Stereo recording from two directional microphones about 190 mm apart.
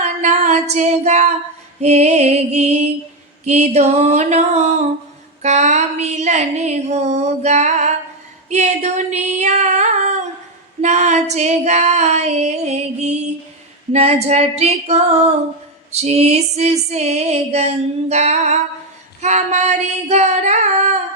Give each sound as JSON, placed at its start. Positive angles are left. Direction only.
{"t": 0.0, "sound": "singing", "side_deg": -35}
{"t": 1.8, "sound": "music", "side_deg": -35}
{"t": 8.4, "sound": "female singing", "side_deg": -35}
{"t": 10.8, "sound": "music", "side_deg": -35}